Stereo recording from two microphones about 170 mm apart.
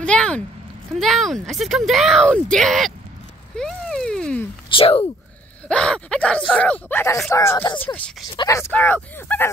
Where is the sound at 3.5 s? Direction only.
Centre (ahead or behind).